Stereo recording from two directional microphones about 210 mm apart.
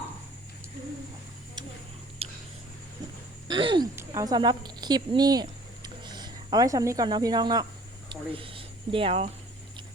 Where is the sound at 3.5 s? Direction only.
20° right (ahead or behind).